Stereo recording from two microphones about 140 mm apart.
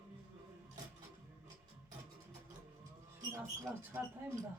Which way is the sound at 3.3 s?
20° right (ahead or behind).